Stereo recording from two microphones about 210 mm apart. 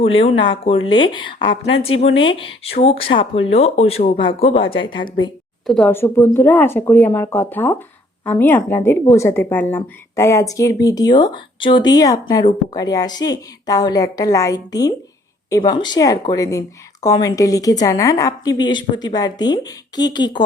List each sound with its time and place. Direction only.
0.3 s a woman's voice: 25° left (ahead or behind)
5.6 s a woman's voice: 5° left (ahead or behind); by 20.4 s 20° left (ahead or behind)